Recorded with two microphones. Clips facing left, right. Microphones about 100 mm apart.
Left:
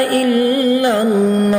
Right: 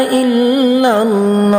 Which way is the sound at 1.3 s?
50° right (ahead or behind).